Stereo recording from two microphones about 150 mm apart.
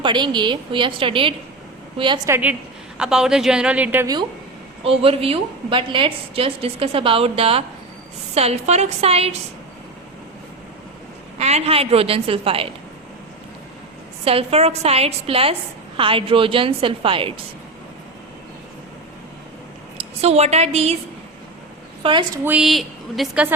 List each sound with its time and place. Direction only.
0.0 s a woman's voice: 30° right (ahead or behind)
2.3 s a woman's voice: 10° right (ahead or behind)
4.0 s speech: 25° right (ahead or behind)
4.8 s a woman's voice: 40° right (ahead or behind)
11.3 s a woman's voice: 45° right (ahead or behind)
14.3 s a woman's voice: 40° right (ahead or behind)
20.2 s a woman's voice: 45° right (ahead or behind)
22.0 s a woman's voice: 35° right (ahead or behind)
22.4 s speech: 5° right (ahead or behind)